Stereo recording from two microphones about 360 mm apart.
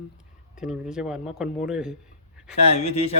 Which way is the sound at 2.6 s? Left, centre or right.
Centre.